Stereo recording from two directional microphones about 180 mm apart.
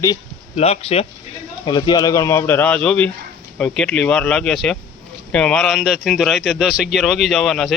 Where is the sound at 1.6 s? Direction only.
25° left (ahead or behind).